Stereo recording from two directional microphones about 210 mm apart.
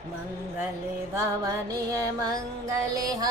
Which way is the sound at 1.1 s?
15° right (ahead or behind).